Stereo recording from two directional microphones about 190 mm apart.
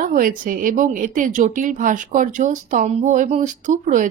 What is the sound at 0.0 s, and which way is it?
A woman's voice, 45° right (ahead or behind).